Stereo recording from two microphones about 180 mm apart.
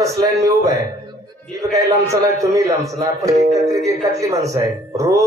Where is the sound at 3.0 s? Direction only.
15° right (ahead or behind).